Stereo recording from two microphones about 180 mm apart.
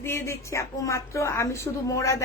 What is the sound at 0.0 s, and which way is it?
A woman's voice, 15° left (ahead or behind).